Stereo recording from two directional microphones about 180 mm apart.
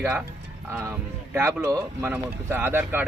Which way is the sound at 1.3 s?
10° right (ahead or behind).